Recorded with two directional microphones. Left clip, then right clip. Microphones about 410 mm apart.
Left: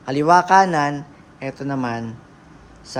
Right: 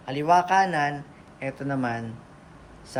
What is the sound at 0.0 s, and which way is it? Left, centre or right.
A man's voice, centre.